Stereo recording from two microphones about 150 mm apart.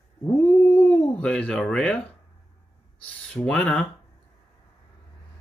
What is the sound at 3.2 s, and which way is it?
Speech, 5° left (ahead or behind).